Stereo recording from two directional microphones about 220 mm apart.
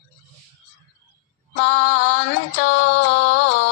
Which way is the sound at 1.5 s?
60° left (ahead or behind).